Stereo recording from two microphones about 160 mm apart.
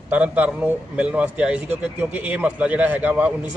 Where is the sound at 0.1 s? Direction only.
10° right (ahead or behind).